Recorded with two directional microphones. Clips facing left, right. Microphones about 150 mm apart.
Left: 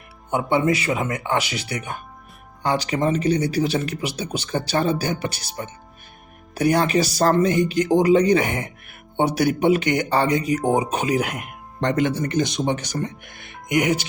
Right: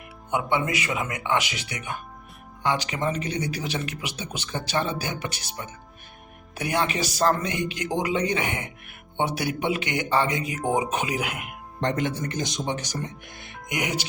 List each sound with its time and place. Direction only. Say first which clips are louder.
0.3 s speech: left 5 dB; 35° left (ahead or behind)
11.8 s speech: left 5 dB; 80° left; by 14.0 s 50° left (ahead or behind)